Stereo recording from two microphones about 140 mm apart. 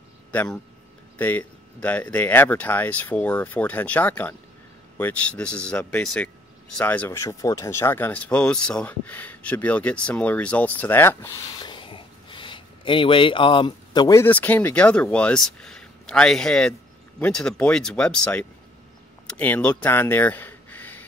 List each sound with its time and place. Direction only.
0.3 s a man's voice: 10° left (ahead or behind)
11.6 s a sound: 35° left (ahead or behind)
14.1 s speech: 15° left (ahead or behind)